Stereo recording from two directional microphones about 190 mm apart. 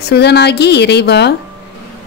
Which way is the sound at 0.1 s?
60° left (ahead or behind).